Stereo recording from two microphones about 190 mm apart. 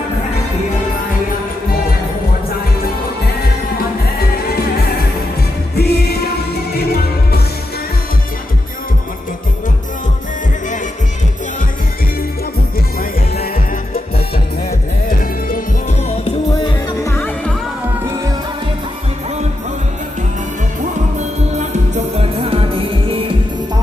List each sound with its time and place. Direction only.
5.7 s music: 55° left (ahead or behind)
15.0 s music: 45° left (ahead or behind)
16.6 s music: 15° left (ahead or behind)
21.2 s music: 40° right (ahead or behind)